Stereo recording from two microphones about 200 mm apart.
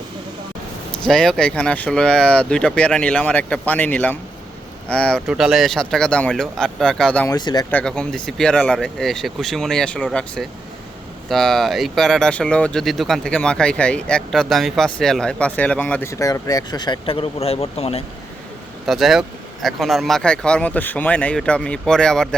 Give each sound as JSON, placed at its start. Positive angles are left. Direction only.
{"t": 0.9, "sound": "speech", "side_deg": 5}
{"t": 7.3, "sound": "speech", "side_deg": 20}
{"t": 7.7, "sound": "speech", "side_deg": 5}
{"t": 18.9, "sound": "speech", "side_deg": 0}